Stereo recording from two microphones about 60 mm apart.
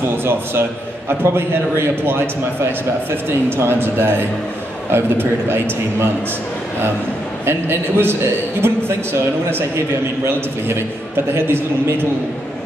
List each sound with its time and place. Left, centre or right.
0.2 s a man's voice: right
3.4 s a man's voice: right
7.4 s a man's voice: right
11.3 s a man's voice: right